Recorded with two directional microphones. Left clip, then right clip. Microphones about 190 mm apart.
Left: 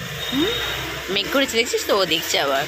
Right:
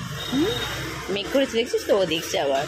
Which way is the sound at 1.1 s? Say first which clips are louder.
Left 3 dB; 5° right (ahead or behind).